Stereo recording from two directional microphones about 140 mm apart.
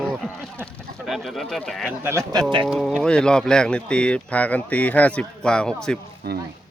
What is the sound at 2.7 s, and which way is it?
Speech, 5° left (ahead or behind).